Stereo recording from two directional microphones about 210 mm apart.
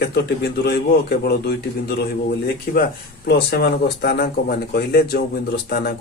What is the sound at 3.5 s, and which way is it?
Speech, 50° left (ahead or behind).